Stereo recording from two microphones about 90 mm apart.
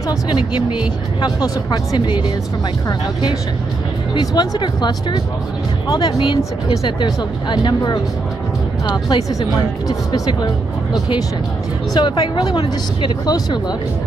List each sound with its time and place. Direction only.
1.2 s speech: 50° left (ahead or behind)
2.0 s speech: 60° left (ahead or behind)
4.3 s speech: 55° left (ahead or behind)
6.0 s speech: 70° left (ahead or behind)
7.0 s speech: 60° left (ahead or behind)
9.3 s speech: 40° left (ahead or behind); by 13.1 s 60° left (ahead or behind)
13.2 s speech: 50° left (ahead or behind)